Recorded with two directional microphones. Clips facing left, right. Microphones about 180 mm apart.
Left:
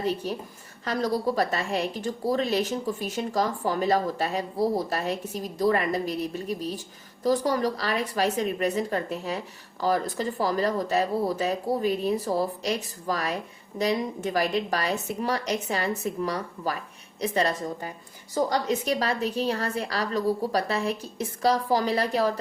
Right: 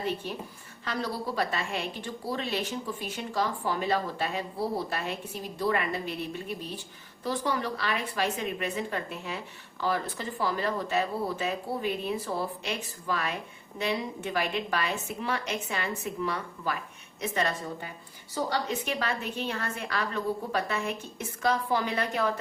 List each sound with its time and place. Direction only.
0.0 s a woman's voice: 40° left (ahead or behind)